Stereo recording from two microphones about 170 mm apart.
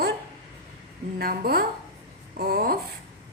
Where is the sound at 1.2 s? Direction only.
60° right (ahead or behind).